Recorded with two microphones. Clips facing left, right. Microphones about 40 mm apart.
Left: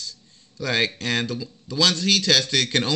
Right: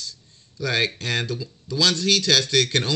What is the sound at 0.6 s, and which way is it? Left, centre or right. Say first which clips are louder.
A man's voice: even; left.